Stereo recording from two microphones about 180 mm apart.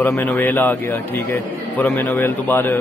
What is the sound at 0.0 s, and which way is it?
A man's voice, 10° left (ahead or behind).